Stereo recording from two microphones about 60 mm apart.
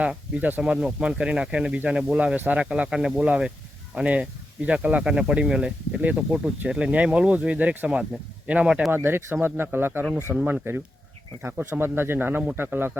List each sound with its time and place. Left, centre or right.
0.0 s speech: right
0.6 s speech: centre
6.0 s speech: right
8.9 s speech: right